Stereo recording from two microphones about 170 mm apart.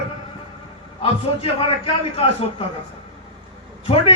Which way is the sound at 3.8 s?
35° left (ahead or behind).